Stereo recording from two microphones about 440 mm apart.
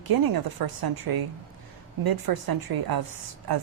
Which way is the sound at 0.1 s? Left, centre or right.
Right.